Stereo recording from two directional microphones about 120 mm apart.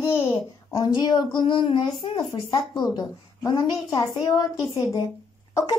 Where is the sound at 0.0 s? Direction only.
25° left (ahead or behind).